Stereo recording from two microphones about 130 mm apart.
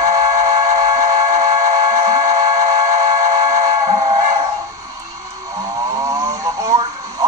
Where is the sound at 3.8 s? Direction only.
45° right (ahead or behind).